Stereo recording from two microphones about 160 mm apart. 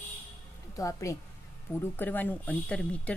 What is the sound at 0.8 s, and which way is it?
A woman's voice, 20° left (ahead or behind).